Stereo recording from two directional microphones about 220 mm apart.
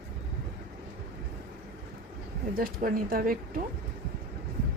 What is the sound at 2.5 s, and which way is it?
A woman's voice, 40° right (ahead or behind).